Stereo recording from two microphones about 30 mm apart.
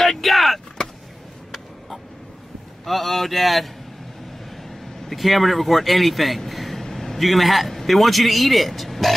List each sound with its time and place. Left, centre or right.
0.0 s vehicle: centre
0.8 s vehicle: left
2.8 s a man's voice: centre